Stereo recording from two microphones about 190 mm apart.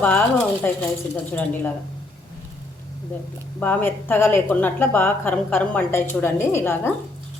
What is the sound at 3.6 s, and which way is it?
A woman's voice, 10° left (ahead or behind).